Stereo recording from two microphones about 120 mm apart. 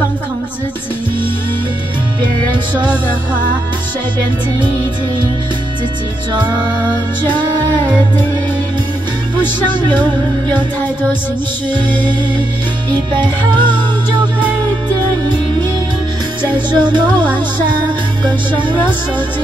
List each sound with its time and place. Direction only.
2.5 s music: 40° right (ahead or behind)
12.9 s music: 40° right (ahead or behind)
16.5 s music: 40° right (ahead or behind)